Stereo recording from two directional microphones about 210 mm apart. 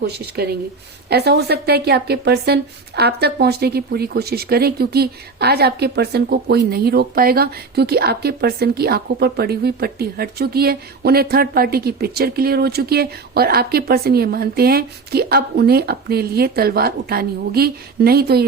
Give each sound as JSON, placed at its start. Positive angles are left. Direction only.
{"t": 0.4, "sound": "a woman's voice", "side_deg": -50}